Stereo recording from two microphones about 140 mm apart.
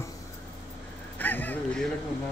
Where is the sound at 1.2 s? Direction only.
15° left (ahead or behind).